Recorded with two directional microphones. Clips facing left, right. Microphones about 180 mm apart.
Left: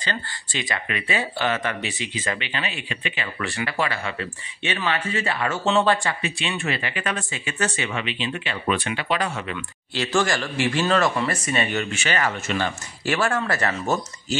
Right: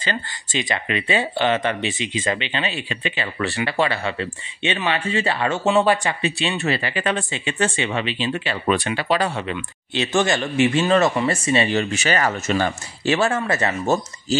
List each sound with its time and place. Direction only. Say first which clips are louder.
0.0 s speech: right 3 dB; 20° right (ahead or behind)
5.7 s speech: right 2 dB; 15° right (ahead or behind)
6.2 s speech: right 5 dB; 35° right (ahead or behind)
9.9 s speech: right 3 dB; 20° right (ahead or behind); by 12.7 s 40° right (ahead or behind)
13.0 s speech: right 3 dB; 25° right (ahead or behind)